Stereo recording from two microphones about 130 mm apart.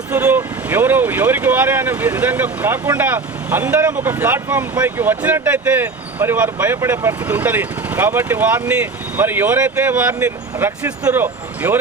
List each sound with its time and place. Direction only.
0.1 s speech: 10° right (ahead or behind)